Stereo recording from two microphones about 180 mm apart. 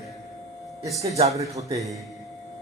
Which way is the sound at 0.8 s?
20° right (ahead or behind).